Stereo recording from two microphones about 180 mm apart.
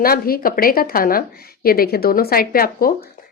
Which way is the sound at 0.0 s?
55° left (ahead or behind).